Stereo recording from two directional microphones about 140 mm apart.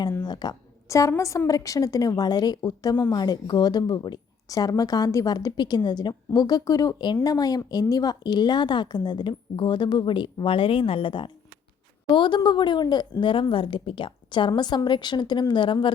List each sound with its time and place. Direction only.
0.2 s speech: 30° left (ahead or behind)